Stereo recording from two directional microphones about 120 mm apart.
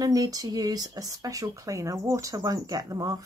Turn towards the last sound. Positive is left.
turn(degrees=-30)  # may be behind; listen again after turning